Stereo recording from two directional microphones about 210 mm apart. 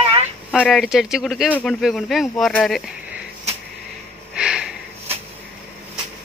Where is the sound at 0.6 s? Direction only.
Centre (ahead or behind).